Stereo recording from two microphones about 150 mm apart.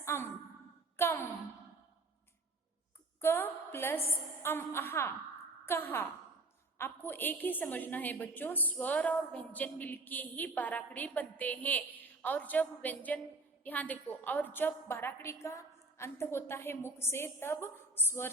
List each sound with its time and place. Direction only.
0.0 s sigh: 20° left (ahead or behind)
0.9 s a sound: 15° left (ahead or behind)
3.2 s a woman's voice: 15° left (ahead or behind)